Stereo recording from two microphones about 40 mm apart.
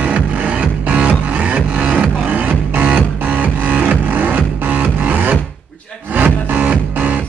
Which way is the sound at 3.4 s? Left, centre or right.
Right.